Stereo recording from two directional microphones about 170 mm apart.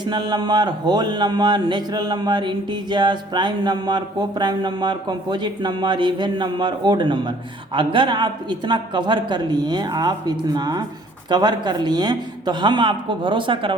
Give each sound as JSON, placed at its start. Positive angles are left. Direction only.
{"t": 0.0, "sound": "speech", "side_deg": -25}